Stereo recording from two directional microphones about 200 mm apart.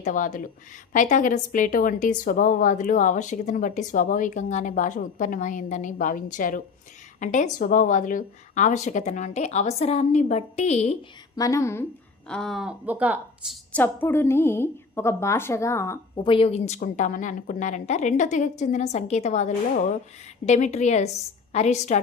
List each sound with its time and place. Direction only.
0.0 s a woman's voice: 40° left (ahead or behind)
11.3 s speech: 15° left (ahead or behind)
12.3 s a woman's voice: centre (ahead or behind)
13.7 s a woman's voice: 10° left (ahead or behind); by 22.0 s 35° left (ahead or behind)